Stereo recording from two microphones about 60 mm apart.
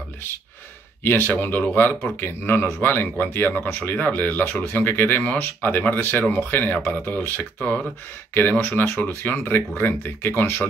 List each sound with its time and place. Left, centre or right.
1.0 s speech: left
8.4 s speech: left